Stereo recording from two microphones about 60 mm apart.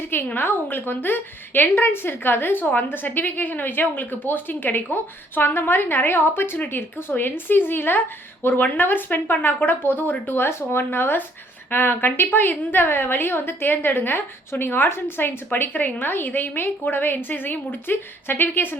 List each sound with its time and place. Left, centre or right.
0.1 s a woman's voice: left